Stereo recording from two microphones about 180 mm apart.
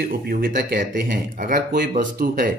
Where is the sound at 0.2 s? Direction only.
55° right (ahead or behind).